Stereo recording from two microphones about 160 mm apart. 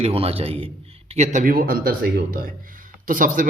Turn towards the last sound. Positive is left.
turn(degrees=-55)  # may be behind; listen again after turning